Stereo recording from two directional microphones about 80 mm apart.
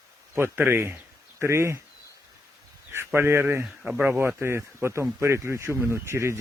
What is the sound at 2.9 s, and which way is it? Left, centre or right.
Speech, right.